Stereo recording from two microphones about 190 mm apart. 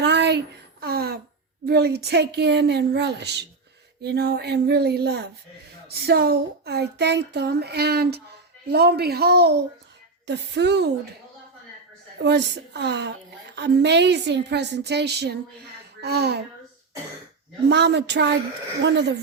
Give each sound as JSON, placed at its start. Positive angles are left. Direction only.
{"t": 0.0, "sound": "a sound", "side_deg": -65}
{"t": 1.6, "sound": "a woman's voice", "side_deg": -55}
{"t": 12.2, "sound": "a woman's voice", "side_deg": -65}
{"t": 17.7, "sound": "a woman's voice", "side_deg": -65}